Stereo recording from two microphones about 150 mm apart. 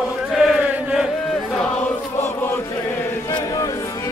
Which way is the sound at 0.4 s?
5° right (ahead or behind).